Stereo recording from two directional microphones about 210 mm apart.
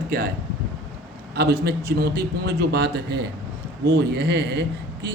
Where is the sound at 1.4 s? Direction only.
50° right (ahead or behind).